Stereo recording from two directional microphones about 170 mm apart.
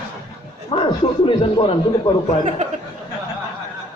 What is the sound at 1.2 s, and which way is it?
Speech, 30° left (ahead or behind).